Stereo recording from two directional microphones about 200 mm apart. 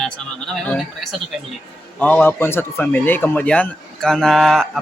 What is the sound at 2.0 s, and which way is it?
Speech, 5° left (ahead or behind).